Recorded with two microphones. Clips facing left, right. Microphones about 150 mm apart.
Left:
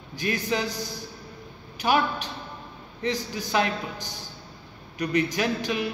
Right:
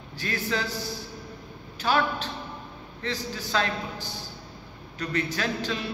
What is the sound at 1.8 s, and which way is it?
A man's voice, 15° left (ahead or behind).